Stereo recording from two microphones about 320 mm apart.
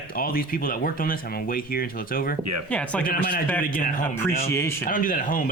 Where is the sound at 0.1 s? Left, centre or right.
Left.